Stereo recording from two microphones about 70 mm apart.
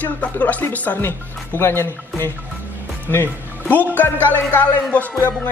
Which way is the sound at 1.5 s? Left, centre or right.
Left.